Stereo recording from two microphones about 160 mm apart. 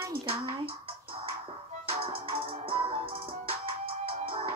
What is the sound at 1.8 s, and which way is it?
Music, 35° right (ahead or behind).